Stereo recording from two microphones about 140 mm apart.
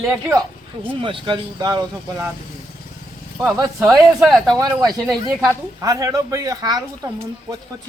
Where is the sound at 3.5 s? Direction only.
25° right (ahead or behind).